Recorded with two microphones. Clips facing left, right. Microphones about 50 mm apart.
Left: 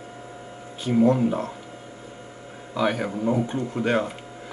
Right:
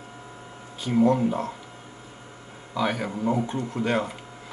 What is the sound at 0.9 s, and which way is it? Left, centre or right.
Speech, centre.